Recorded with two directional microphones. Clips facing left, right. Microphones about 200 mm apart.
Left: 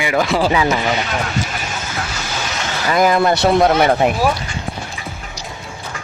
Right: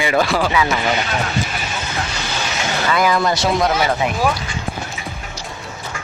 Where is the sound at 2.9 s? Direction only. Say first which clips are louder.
Left 4 dB; 45° left (ahead or behind).